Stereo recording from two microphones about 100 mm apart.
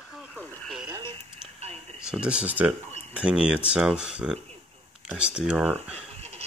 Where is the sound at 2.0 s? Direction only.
10° right (ahead or behind).